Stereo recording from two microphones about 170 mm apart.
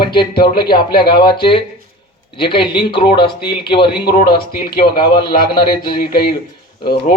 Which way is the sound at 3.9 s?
65° left (ahead or behind).